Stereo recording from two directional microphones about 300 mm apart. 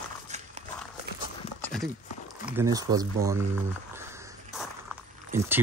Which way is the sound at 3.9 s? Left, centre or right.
Centre.